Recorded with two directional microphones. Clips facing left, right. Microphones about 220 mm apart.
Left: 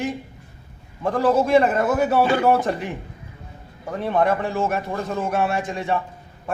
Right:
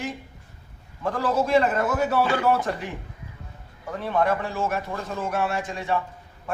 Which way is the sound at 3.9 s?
20° left (ahead or behind).